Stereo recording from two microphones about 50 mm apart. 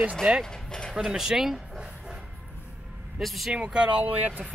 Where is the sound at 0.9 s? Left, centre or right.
Centre.